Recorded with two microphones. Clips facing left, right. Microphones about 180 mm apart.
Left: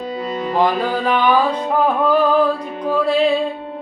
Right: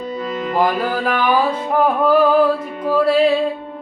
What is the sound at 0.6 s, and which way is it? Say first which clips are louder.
Music: left 1 dB; 5° right (ahead or behind).